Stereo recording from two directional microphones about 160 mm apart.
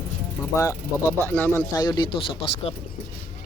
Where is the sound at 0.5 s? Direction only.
20° left (ahead or behind).